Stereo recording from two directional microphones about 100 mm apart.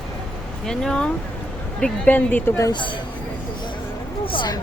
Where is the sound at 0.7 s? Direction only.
5° left (ahead or behind).